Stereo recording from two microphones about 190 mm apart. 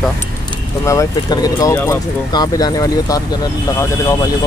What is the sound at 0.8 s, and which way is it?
Speech, 15° left (ahead or behind).